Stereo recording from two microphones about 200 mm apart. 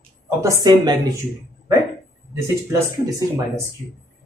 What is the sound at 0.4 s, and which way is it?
Speech, 20° right (ahead or behind).